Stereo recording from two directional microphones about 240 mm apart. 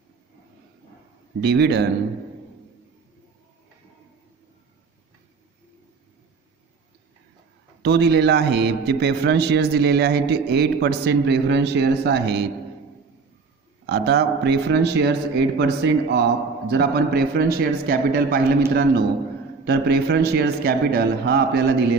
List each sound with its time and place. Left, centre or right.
1.4 s speech: right
7.8 s speech: right
13.8 s a man's voice: right